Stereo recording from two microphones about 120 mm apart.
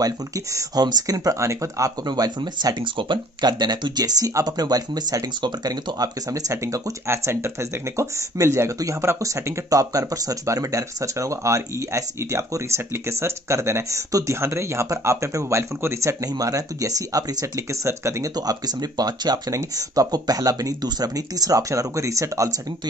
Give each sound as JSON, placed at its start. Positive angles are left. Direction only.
{"t": 0.0, "sound": "speech", "side_deg": -30}